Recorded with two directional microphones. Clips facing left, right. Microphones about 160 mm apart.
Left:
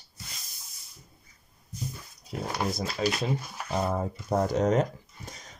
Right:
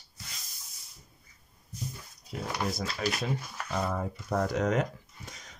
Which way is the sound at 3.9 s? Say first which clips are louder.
Left 3 dB; 30° left (ahead or behind).